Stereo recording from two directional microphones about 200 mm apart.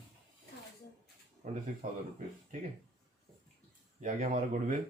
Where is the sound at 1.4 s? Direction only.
40° right (ahead or behind).